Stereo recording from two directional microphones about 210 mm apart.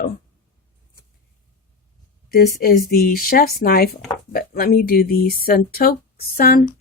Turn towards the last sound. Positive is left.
turn(degrees=45)  # may be behind; listen again after turning